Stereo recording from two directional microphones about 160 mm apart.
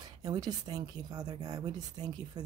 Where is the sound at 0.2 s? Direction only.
25° right (ahead or behind).